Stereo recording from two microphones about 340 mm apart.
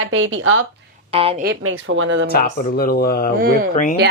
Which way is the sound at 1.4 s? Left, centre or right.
Right.